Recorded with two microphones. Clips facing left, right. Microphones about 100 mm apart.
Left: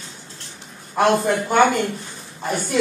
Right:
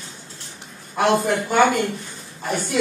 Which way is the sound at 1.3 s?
Centre (ahead or behind).